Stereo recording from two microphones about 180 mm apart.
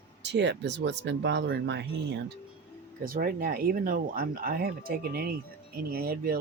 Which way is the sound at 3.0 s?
50° right (ahead or behind).